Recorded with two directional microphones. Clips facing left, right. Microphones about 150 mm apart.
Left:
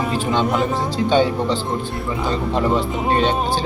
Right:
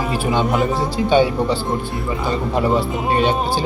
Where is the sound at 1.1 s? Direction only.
10° right (ahead or behind).